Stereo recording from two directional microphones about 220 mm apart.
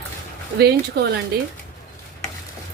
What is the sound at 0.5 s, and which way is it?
Speech, 50° right (ahead or behind).